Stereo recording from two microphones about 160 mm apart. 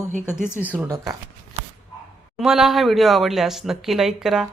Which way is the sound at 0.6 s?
10° right (ahead or behind).